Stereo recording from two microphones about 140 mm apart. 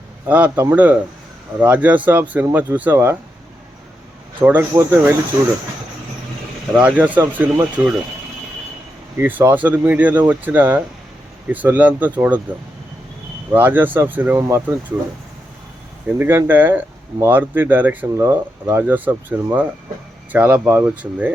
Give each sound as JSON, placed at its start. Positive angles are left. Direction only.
{"t": 0.3, "sound": "speech", "side_deg": -10}
{"t": 4.4, "sound": "speech", "side_deg": -10}
{"t": 6.7, "sound": "speech", "side_deg": -10}
{"t": 9.1, "sound": "speech", "side_deg": -15}
{"t": 13.5, "sound": "speech", "side_deg": -15}
{"t": 16.0, "sound": "speech", "side_deg": -15}